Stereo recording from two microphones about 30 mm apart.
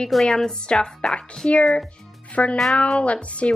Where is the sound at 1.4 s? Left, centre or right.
Left.